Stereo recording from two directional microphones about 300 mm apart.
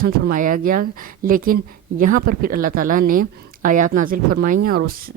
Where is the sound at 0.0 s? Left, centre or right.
Right.